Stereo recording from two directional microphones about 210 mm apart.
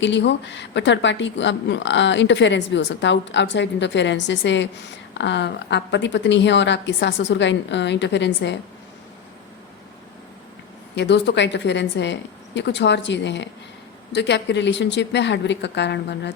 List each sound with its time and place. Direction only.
0.0 s speech: 60° left (ahead or behind)
10.9 s speech: 55° left (ahead or behind)